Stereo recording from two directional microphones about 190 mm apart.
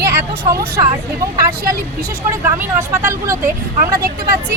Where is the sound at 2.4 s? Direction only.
10° right (ahead or behind).